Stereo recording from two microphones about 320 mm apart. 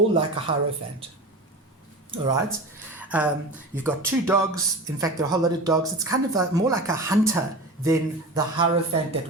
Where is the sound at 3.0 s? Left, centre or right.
Centre.